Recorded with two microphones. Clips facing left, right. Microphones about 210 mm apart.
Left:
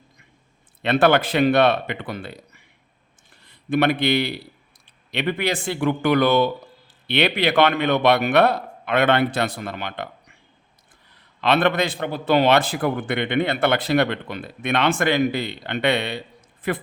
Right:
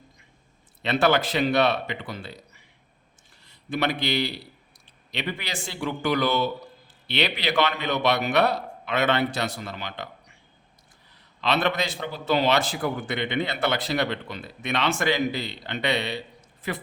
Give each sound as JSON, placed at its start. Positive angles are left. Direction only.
{"t": 0.8, "sound": "a man's voice", "side_deg": 55}
{"t": 11.3, "sound": "a man's voice", "side_deg": 55}